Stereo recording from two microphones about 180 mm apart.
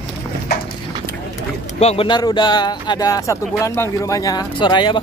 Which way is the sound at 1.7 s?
35° left (ahead or behind).